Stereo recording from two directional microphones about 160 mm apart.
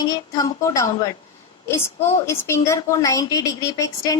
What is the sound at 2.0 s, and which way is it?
A woman's voice, 15° left (ahead or behind).